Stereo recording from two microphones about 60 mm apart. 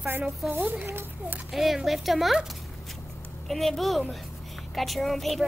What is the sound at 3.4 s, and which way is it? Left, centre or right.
A child's voice, centre.